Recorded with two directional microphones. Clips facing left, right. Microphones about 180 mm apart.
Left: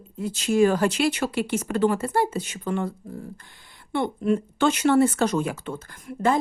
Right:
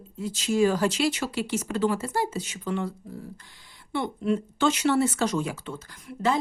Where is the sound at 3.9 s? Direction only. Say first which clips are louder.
Left 3 dB; 55° left (ahead or behind).